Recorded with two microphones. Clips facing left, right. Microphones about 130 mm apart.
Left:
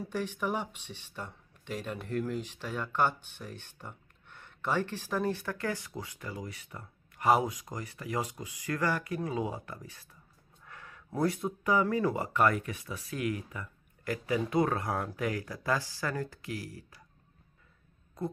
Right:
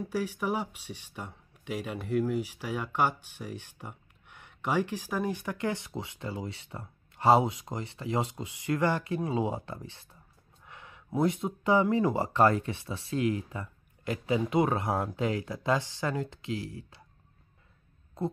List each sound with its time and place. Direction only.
0.1 s speech: 10° right (ahead or behind); by 10.0 s 25° right (ahead or behind)
10.6 s a sound: 20° right (ahead or behind)
11.1 s speech: 20° right (ahead or behind)